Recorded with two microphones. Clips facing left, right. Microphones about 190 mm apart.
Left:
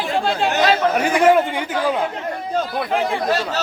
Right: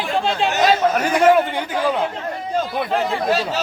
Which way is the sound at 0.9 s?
10° left (ahead or behind).